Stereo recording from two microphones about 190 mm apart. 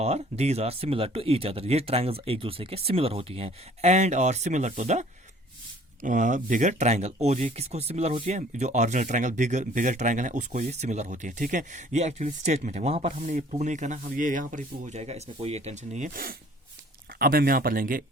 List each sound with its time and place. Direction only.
0.0 s speech: 35° right (ahead or behind)